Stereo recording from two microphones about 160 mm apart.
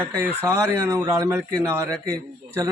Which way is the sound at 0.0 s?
15° right (ahead or behind).